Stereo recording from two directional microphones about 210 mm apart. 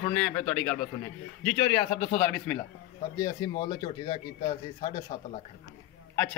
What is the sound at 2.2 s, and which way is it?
A man's voice, 10° left (ahead or behind).